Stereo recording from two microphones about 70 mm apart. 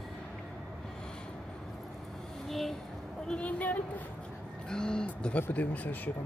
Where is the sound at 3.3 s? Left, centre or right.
Left.